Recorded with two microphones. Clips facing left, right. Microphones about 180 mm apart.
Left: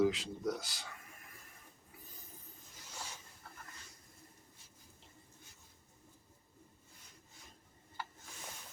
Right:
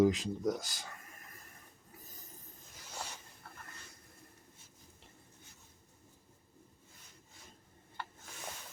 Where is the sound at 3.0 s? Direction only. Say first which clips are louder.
Right 4 dB; 65° right (ahead or behind).